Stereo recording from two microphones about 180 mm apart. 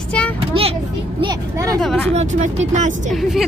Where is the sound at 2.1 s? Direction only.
40° right (ahead or behind).